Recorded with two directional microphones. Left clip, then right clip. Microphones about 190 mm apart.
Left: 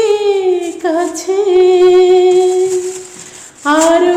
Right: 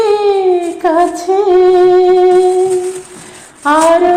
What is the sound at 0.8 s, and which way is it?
Female singing, 10° left (ahead or behind).